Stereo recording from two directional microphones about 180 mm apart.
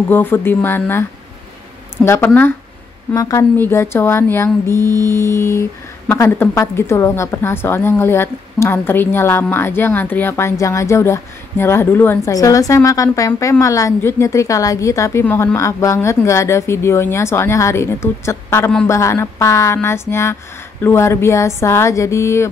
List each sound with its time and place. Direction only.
0.1 s speech: 10° left (ahead or behind)
2.0 s speech: 15° left (ahead or behind)